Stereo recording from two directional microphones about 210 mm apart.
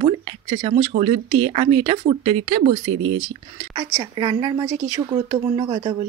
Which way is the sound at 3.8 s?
20° right (ahead or behind).